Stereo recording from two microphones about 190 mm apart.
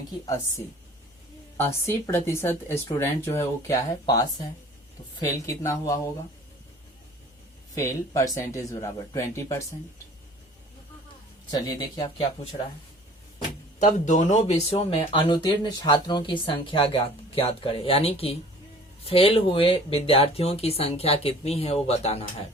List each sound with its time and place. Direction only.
1.5 s speech: 15° left (ahead or behind)
7.8 s speech: 15° left (ahead or behind)
11.5 s speech: 25° left (ahead or behind)
13.7 s speech: 40° left (ahead or behind)